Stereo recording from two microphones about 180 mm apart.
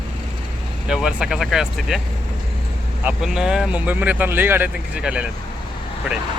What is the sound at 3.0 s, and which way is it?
Speech, 5° right (ahead or behind).